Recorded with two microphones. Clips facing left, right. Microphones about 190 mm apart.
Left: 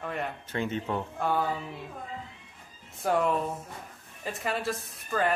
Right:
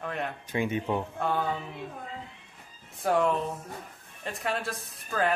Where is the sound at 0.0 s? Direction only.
Centre (ahead or behind).